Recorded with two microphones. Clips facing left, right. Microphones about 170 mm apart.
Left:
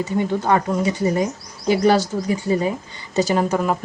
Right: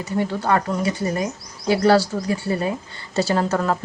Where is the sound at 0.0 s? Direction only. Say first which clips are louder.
Left 2 dB; 20° left (ahead or behind).